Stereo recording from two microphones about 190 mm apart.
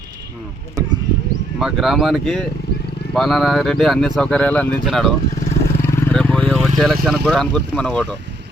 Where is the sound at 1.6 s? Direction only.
Centre (ahead or behind).